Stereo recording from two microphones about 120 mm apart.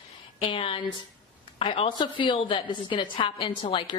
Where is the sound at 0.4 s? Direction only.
50° left (ahead or behind).